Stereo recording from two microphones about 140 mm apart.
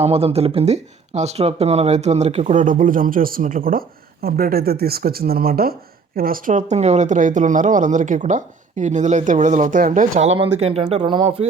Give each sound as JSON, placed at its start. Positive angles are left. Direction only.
{"t": 0.0, "sound": "speech", "side_deg": -45}
{"t": 10.3, "sound": "speech", "side_deg": -40}